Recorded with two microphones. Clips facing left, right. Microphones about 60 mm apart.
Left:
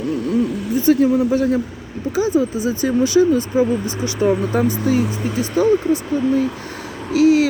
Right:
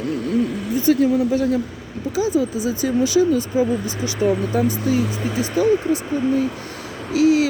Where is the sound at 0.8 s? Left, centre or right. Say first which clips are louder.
Left 2 dB; left.